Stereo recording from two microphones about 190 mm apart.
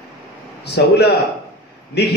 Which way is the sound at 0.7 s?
60° left (ahead or behind).